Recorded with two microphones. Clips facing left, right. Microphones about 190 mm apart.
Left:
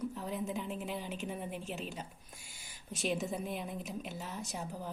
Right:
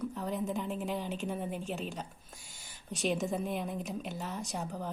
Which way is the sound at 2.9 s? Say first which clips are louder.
Right 3 dB; 5° left (ahead or behind).